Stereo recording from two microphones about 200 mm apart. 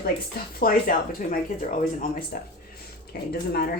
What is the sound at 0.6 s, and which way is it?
Speech, 45° left (ahead or behind).